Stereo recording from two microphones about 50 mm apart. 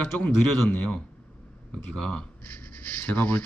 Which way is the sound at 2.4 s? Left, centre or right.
Left.